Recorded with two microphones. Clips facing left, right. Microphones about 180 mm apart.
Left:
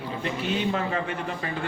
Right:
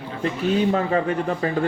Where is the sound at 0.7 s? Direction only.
35° right (ahead or behind).